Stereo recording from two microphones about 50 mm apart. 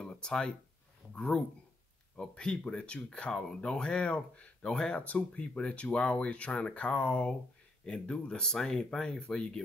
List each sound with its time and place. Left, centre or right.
0.0 s speech: centre
5.0 s speech: left
7.8 s speech: centre